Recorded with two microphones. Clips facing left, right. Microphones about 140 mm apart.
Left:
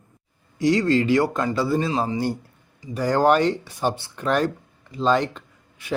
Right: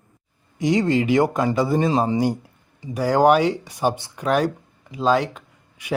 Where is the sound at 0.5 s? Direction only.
20° right (ahead or behind).